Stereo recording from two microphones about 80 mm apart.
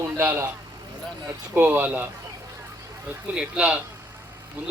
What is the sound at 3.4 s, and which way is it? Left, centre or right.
Speech, centre.